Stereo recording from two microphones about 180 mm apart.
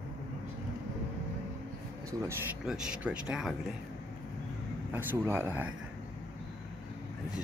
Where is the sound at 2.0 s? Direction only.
15° right (ahead or behind).